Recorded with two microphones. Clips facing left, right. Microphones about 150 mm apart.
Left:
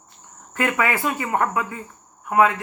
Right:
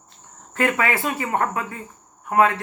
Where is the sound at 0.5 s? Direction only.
30° right (ahead or behind).